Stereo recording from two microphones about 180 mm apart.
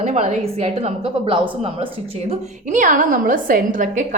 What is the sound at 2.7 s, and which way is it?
A woman's voice, 45° right (ahead or behind).